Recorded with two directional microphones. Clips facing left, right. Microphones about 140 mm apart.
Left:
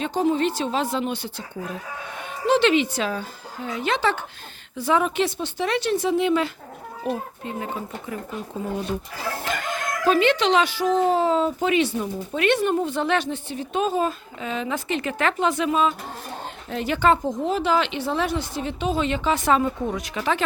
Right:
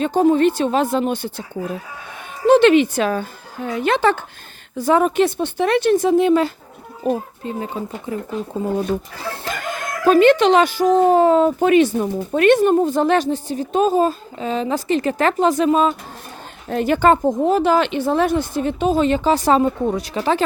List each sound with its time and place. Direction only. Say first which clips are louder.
0.0 s speech: right 7 dB; 50° right (ahead or behind)
2.5 s speech: right 7 dB; 55° right (ahead or behind); by 8.7 s 25° right (ahead or behind)
9.4 s speech: right 2 dB; 45° right (ahead or behind)